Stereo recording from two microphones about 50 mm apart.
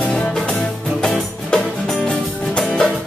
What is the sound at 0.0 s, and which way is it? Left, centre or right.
Music, centre.